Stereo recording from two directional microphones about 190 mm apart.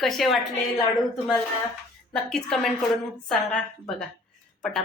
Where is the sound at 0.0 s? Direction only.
Centre (ahead or behind).